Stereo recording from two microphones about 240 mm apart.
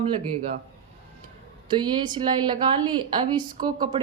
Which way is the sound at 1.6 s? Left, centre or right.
Centre.